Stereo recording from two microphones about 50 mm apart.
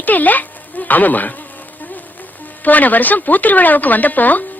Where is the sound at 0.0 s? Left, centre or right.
Left.